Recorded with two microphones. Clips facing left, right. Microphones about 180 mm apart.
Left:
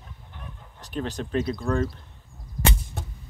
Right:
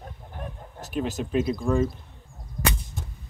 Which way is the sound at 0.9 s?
5° right (ahead or behind).